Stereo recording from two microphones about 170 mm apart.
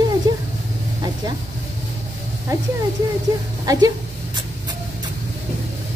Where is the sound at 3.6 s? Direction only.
20° right (ahead or behind).